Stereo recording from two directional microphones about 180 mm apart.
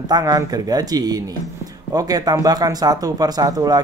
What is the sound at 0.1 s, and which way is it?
Speech, 20° right (ahead or behind).